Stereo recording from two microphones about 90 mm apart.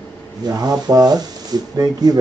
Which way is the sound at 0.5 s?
45° right (ahead or behind).